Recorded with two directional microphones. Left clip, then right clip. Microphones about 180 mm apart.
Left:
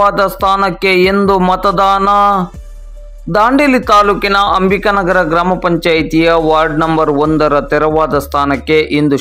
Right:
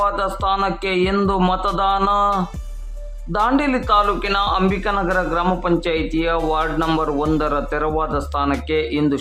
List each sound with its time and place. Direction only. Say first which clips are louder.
0.0 s speech: left 9 dB; 35° left (ahead or behind)